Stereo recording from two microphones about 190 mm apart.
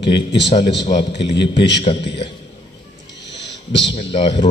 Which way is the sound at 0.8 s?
25° left (ahead or behind).